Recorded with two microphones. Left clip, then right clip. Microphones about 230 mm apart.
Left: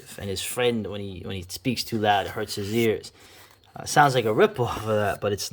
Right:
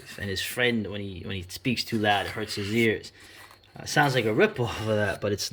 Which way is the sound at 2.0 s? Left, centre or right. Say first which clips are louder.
Left 3 dB; left.